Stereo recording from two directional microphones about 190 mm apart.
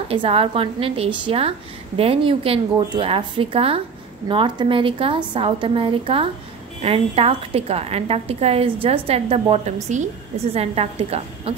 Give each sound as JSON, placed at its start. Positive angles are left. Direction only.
{"t": 0.1, "sound": "a woman's voice", "side_deg": -30}